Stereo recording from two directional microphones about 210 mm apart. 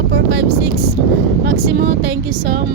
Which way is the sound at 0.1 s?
50° right (ahead or behind).